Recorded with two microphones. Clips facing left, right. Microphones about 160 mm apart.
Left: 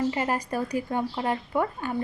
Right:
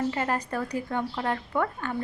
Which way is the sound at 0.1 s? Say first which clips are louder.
Left 1 dB; 10° left (ahead or behind).